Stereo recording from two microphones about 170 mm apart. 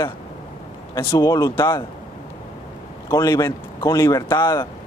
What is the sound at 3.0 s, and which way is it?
Speech, 20° left (ahead or behind).